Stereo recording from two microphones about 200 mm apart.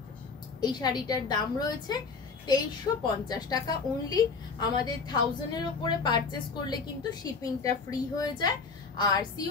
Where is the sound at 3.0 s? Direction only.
20° left (ahead or behind).